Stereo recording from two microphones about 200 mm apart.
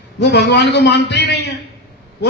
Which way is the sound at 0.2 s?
55° left (ahead or behind).